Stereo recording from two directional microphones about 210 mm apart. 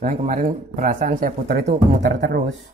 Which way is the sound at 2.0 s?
55° right (ahead or behind).